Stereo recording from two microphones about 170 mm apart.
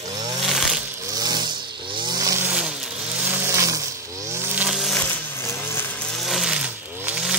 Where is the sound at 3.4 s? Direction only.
20° right (ahead or behind).